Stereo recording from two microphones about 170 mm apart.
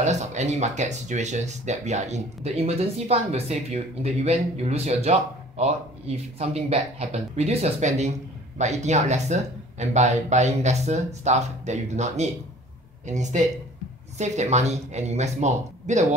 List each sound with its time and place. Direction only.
0.0 s speech: 40° right (ahead or behind)